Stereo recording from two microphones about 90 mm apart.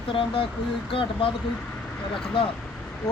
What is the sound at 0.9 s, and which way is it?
Speech, 80° left.